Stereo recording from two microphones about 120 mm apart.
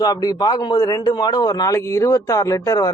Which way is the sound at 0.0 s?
30° left (ahead or behind).